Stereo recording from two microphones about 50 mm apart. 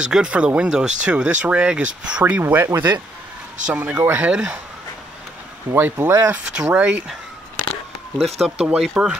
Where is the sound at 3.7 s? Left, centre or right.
Right.